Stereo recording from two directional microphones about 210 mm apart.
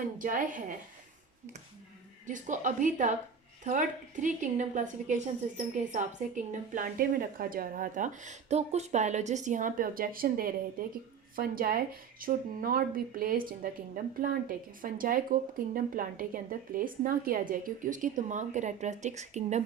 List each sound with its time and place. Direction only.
0.2 s speech: 40° right (ahead or behind)
2.2 s a woman's voice: 35° right (ahead or behind)